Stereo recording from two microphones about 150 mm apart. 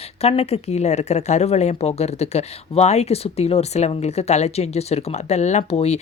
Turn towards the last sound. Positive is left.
turn(degrees=45)  # may be behind; listen again after turning